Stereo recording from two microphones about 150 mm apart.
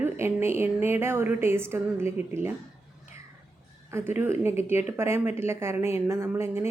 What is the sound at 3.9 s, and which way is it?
A woman's voice, 15° right (ahead or behind).